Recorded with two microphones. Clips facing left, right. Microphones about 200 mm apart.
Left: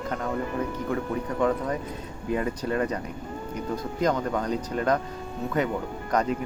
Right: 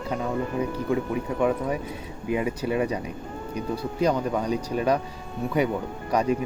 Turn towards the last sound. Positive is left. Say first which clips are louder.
# right 2 dB
turn(degrees=-10)  # may be behind; listen again after turning